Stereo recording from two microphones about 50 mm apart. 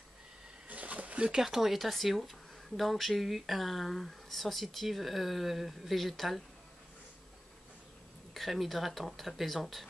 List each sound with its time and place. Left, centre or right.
0.7 s a sound: right
1.3 s speech: centre
8.4 s speech: centre